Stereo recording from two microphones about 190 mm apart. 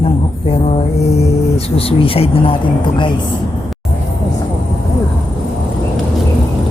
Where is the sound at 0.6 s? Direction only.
35° left (ahead or behind).